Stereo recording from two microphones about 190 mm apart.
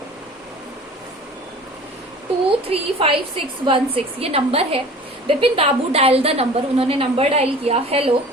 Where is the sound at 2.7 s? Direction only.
30° right (ahead or behind).